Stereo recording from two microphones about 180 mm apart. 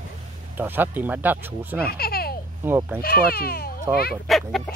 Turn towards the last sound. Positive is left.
turn(degrees=0)  # may be behind; listen again after turning